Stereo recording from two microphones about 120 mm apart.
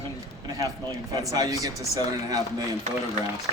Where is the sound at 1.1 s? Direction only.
35° right (ahead or behind).